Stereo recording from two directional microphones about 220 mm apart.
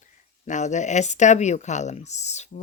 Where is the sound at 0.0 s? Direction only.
35° left (ahead or behind).